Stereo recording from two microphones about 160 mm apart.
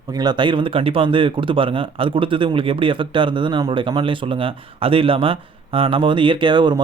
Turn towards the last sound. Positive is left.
turn(degrees=-30)  # may be behind; listen again after turning